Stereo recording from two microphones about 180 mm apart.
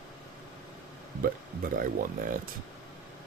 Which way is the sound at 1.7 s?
50° right (ahead or behind).